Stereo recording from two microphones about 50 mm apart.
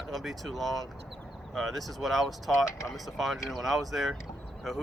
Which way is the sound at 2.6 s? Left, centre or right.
Left.